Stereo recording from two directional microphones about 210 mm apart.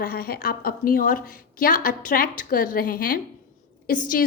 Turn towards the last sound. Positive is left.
turn(degrees=40)  # may be behind; listen again after turning